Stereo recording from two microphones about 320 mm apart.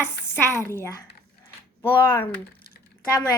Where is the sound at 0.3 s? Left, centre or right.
Centre.